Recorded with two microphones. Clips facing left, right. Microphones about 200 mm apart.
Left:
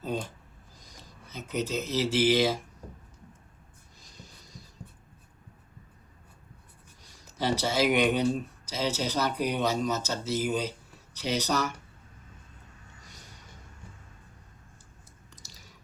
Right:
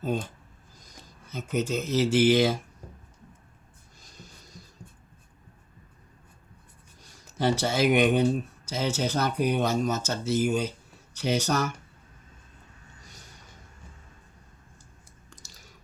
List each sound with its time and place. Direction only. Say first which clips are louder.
1.3 s speech: right 3 dB; 50° right (ahead or behind)
7.3 s speech: right 2 dB; 50° right (ahead or behind)
15.3 s squish: right 2 dB; 50° right (ahead or behind)